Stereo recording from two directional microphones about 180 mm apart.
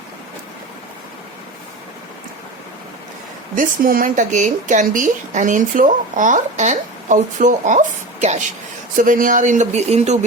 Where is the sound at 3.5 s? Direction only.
50° right (ahead or behind).